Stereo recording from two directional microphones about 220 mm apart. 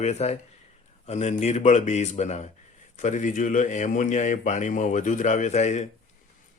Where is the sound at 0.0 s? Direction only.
30° left (ahead or behind).